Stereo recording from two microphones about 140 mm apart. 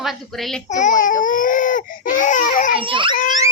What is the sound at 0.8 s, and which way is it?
Baby cry, 65° left (ahead or behind).